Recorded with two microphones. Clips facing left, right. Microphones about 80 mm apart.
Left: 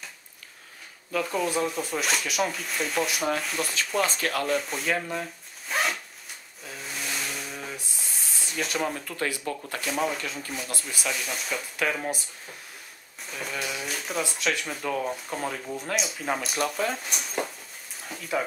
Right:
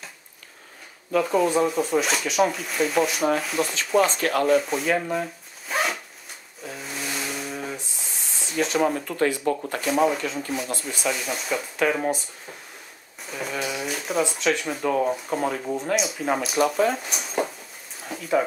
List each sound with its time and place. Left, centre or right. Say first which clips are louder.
1.1 s speech: right 6 dB; centre
5.1 s zipper: right 6 dB; centre
6.6 s a sound: right 4 dB; centre
8.8 s speech: right 7 dB; centre
13.2 s speech: right 4 dB; centre
14.9 s speech: right 6 dB; centre
15.1 s speech: right 6 dB; centre
15.6 s speech: right 6 dB; right
15.9 s speech: right 4 dB; centre
18.0 s a sound: right 6 dB; centre